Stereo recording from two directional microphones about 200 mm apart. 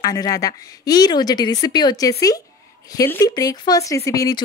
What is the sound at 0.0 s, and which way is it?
A woman's voice, 20° left (ahead or behind).